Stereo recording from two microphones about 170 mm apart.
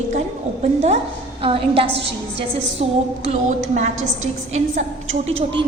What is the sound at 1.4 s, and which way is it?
A woman's voice, 35° right (ahead or behind).